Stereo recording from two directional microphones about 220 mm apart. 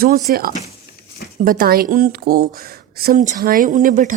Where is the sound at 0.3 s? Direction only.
45° right (ahead or behind).